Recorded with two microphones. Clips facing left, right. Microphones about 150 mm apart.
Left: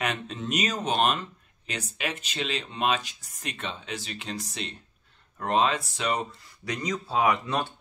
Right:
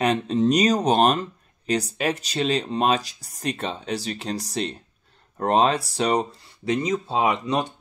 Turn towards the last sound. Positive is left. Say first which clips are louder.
# right 3 dB
turn(degrees=-20)  # may be behind; listen again after turning